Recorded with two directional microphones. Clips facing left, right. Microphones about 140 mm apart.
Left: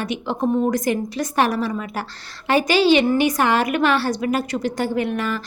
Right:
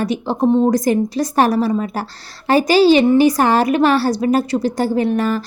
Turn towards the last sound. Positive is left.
turn(degrees=-35)  # may be behind; listen again after turning